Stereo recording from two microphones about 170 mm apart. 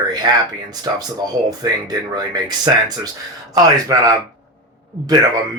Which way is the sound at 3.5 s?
20° right (ahead or behind).